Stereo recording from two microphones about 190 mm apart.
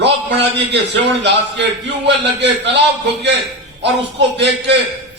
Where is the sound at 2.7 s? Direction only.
65° right (ahead or behind).